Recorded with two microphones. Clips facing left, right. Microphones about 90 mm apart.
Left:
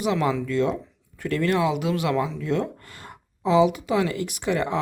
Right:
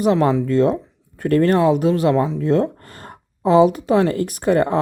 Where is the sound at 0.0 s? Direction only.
40° right (ahead or behind).